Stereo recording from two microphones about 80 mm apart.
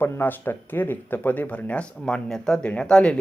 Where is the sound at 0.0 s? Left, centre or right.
Left.